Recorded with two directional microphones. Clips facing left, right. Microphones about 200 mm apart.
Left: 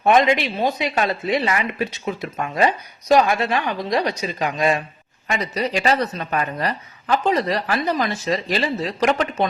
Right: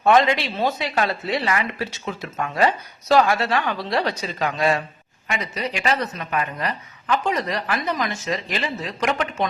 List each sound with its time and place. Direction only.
0.0 s speech: 15° left (ahead or behind)
5.3 s a woman's voice: 35° left (ahead or behind)